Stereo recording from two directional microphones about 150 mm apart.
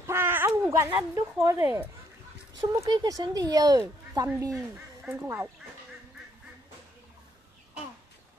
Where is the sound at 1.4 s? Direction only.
20° right (ahead or behind).